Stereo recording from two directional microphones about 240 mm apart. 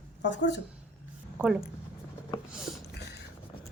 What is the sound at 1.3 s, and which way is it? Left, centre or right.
Speech, centre.